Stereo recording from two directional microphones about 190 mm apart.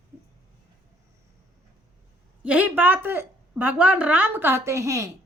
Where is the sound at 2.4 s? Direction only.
10° right (ahead or behind).